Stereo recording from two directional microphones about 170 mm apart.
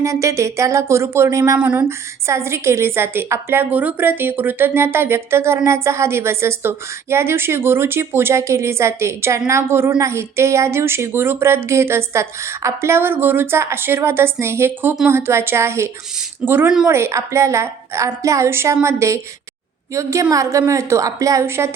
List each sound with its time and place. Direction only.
0.0 s a woman's voice: 20° right (ahead or behind)